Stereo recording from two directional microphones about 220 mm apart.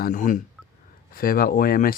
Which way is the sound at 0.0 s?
35° left (ahead or behind).